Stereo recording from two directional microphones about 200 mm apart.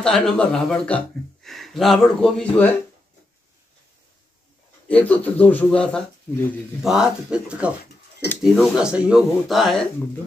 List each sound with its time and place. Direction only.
0.0 s speech: centre (ahead or behind)
4.8 s a man's voice: 10° left (ahead or behind)